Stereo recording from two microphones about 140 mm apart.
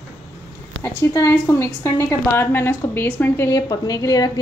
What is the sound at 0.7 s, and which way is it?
A woman's voice, 20° left (ahead or behind).